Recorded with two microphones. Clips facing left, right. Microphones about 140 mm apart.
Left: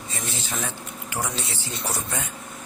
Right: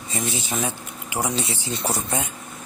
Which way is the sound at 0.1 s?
15° right (ahead or behind).